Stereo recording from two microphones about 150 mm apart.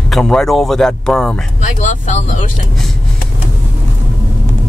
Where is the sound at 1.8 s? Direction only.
55° left (ahead or behind).